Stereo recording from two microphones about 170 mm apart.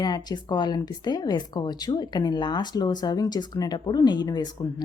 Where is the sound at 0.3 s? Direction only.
25° left (ahead or behind).